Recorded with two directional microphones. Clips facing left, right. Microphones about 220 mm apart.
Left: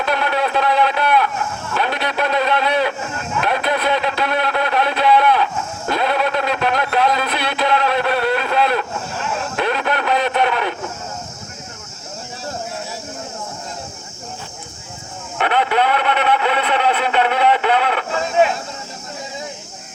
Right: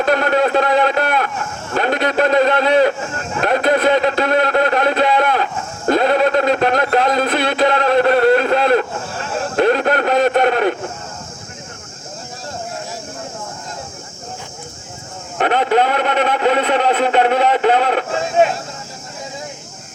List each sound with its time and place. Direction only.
0.0 s speech: 50° right (ahead or behind)
15.4 s speech: 40° right (ahead or behind)